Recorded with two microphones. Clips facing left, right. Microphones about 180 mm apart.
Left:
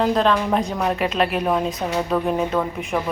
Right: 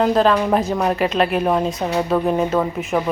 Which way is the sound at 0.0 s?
5° right (ahead or behind).